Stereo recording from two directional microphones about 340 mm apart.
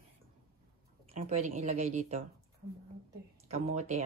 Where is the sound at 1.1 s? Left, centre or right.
Centre.